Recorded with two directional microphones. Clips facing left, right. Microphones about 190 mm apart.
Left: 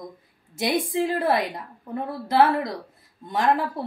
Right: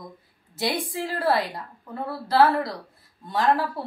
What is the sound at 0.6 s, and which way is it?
A woman's voice, 20° left (ahead or behind).